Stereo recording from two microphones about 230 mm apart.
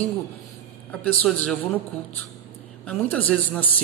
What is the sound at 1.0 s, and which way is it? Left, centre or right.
Speech, centre.